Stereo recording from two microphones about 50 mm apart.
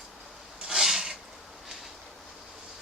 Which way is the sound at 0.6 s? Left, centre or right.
Centre.